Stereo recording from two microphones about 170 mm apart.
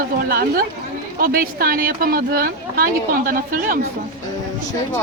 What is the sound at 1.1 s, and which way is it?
Speech, 55° right (ahead or behind).